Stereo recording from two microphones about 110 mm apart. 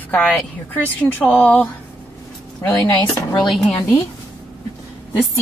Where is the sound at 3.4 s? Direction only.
Centre (ahead or behind).